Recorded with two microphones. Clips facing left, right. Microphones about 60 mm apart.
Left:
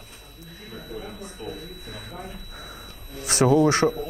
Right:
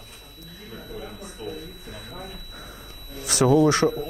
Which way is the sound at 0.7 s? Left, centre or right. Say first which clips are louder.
Left 1 dB; left.